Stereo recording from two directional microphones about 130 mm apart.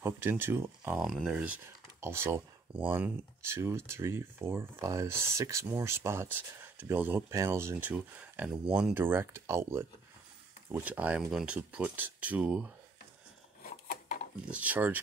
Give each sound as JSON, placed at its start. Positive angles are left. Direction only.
{"t": 0.0, "sound": "speech", "side_deg": -15}
{"t": 0.9, "sound": "speech", "side_deg": -5}
{"t": 7.9, "sound": "speech", "side_deg": -5}
{"t": 8.9, "sound": "speech", "side_deg": -15}
{"t": 13.6, "sound": "filing", "side_deg": 90}
{"t": 14.5, "sound": "speech", "side_deg": -10}